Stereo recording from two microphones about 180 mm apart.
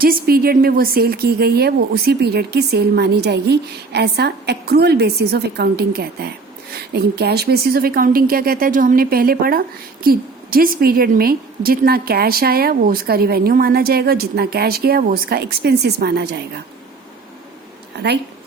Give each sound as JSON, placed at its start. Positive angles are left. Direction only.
{"t": 0.0, "sound": "speech", "side_deg": -55}